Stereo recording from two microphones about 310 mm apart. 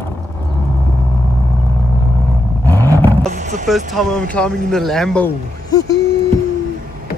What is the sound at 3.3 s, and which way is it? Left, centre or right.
Music, right.